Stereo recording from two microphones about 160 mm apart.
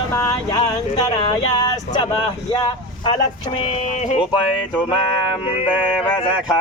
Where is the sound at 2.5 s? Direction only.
25° left (ahead or behind).